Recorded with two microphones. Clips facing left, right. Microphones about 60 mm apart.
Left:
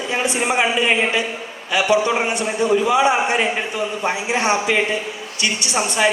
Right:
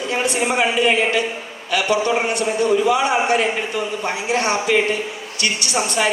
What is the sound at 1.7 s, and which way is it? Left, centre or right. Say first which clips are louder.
A man's voice: left 1 dB; left.